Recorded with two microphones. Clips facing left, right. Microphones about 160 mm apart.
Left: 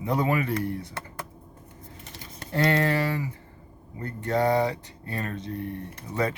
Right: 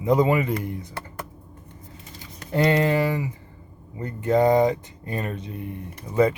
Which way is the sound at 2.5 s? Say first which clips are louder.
Right 4 dB; 15° right (ahead or behind).